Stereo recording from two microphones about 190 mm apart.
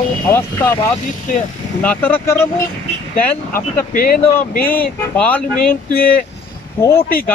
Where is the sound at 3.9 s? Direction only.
50° left (ahead or behind).